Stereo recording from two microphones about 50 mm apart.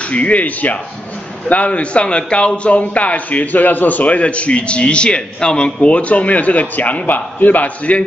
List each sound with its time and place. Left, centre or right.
0.1 s speech: left